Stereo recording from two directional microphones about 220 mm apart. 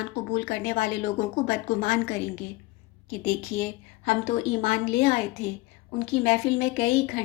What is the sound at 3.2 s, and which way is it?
A woman's voice, 30° left (ahead or behind).